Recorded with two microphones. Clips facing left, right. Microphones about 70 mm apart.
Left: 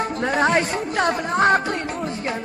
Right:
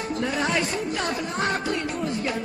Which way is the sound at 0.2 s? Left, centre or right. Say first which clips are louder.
Left 6 dB; left.